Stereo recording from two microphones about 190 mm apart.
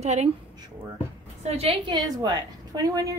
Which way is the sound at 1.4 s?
30° right (ahead or behind).